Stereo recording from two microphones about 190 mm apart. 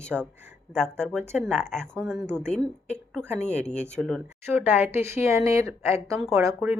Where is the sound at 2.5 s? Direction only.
5° left (ahead or behind).